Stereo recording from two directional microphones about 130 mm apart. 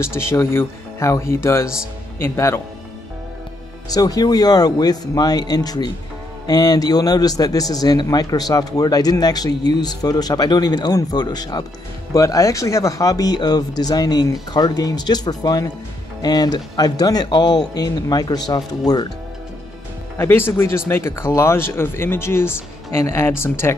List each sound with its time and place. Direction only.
0.0 s speech: 20° left (ahead or behind)
3.9 s a man's voice: 30° left (ahead or behind)
20.2 s speech: 15° left (ahead or behind)